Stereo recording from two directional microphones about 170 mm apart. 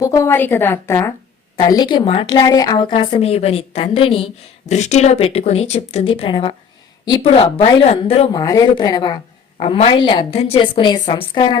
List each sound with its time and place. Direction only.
0.0 s a woman's voice: 20° left (ahead or behind); by 8.3 s 35° left (ahead or behind)
8.3 s a woman's voice: 20° left (ahead or behind)